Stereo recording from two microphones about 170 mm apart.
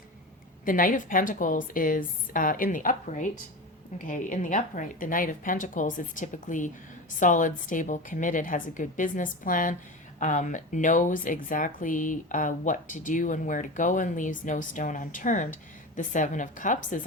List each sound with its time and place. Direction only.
0.6 s speech: 55° left (ahead or behind)